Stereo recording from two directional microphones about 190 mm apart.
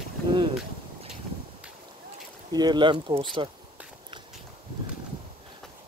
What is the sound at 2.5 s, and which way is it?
Speech, 20° right (ahead or behind).